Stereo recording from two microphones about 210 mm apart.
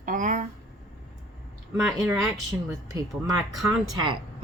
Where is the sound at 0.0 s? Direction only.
40° right (ahead or behind).